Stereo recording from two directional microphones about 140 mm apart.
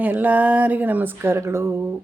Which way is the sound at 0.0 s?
10° right (ahead or behind).